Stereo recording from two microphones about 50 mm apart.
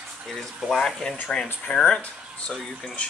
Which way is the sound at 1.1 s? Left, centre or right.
Left.